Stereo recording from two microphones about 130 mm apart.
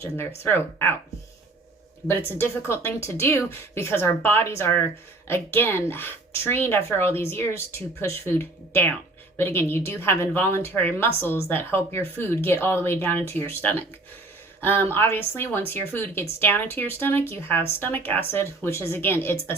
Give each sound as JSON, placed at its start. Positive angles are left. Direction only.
{"t": 0.4, "sound": "speech", "side_deg": 15}
{"t": 2.0, "sound": "speech", "side_deg": 15}